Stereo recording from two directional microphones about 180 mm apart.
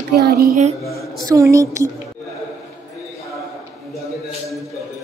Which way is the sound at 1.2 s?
20° right (ahead or behind).